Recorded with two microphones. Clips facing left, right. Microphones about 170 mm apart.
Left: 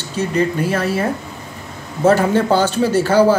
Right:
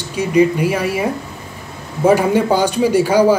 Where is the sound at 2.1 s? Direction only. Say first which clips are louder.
Right 1 dB; 10° right (ahead or behind).